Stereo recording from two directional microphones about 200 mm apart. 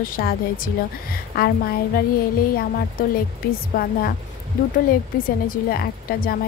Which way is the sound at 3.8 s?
50° left (ahead or behind).